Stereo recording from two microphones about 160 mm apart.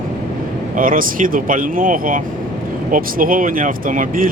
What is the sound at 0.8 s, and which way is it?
Speech, 60° right (ahead or behind).